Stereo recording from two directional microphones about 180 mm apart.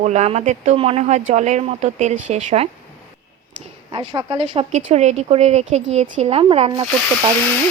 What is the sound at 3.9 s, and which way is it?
A woman's voice, 25° right (ahead or behind).